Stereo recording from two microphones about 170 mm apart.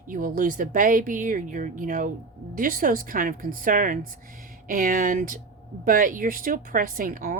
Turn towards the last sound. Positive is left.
turn(degrees=-55)  # may be behind; listen again after turning